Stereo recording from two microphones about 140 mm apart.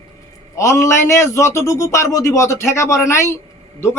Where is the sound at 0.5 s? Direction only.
20° left (ahead or behind).